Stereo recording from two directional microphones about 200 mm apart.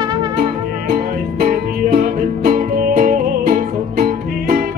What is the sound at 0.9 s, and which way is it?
Music, 50° right (ahead or behind).